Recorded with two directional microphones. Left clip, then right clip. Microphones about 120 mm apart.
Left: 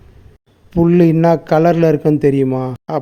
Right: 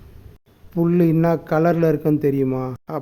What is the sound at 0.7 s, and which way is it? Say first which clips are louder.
A man's voice: left 6 dB; 25° left (ahead or behind).